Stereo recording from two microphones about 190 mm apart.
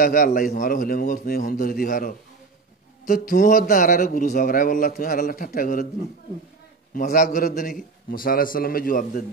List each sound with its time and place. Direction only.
0.0 s a man's voice: 50° left (ahead or behind)
6.9 s a man's voice: 45° left (ahead or behind)